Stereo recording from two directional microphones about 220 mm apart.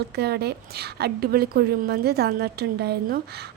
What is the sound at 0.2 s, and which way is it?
A woman's voice, 45° right (ahead or behind).